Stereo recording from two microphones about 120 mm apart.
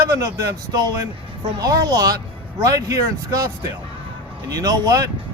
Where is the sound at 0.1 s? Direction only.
30° right (ahead or behind).